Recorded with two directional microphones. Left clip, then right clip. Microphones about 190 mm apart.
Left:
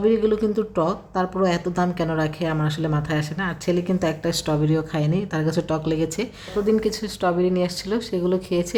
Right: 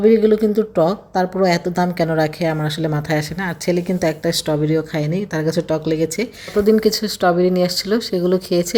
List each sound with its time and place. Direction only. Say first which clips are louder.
0.0 s speech: right 6 dB; 20° right (ahead or behind)
6.7 s speech: right 6 dB; 20° right (ahead or behind)